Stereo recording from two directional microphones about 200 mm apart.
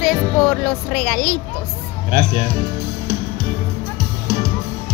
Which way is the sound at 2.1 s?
50° right (ahead or behind).